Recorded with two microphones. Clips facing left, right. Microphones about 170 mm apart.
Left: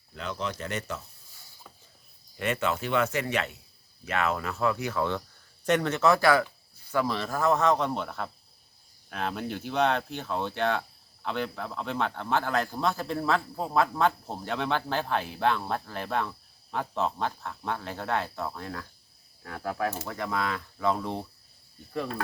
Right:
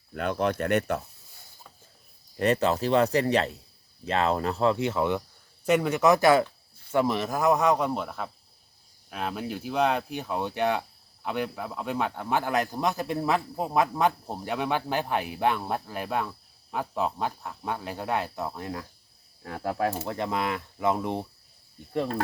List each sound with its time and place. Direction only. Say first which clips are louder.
0.1 s speech: right 7 dB; 55° right (ahead or behind)
2.4 s speech: right 5 dB; 35° right (ahead or behind); by 18.9 s 20° right (ahead or behind)
19.4 s speech: right 3 dB; 30° right (ahead or behind)
21.9 s speech: right 4 dB; 30° right (ahead or behind)